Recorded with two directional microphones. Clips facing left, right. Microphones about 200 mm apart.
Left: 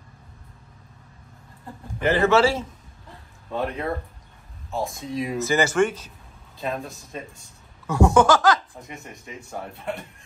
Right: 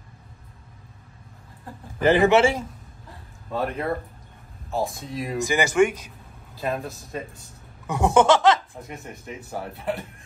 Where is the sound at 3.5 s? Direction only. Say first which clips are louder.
Right 1 dB; centre (ahead or behind).